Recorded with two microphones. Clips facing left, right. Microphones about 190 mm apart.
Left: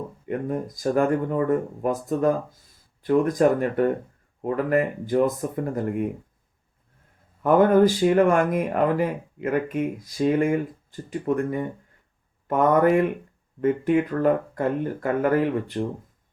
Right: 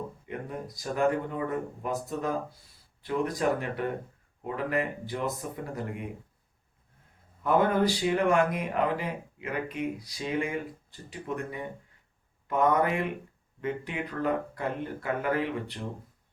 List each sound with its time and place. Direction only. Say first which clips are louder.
0.3 s speech: left 13 dB; 50° left (ahead or behind)
7.4 s speech: left 8 dB; 50° left (ahead or behind)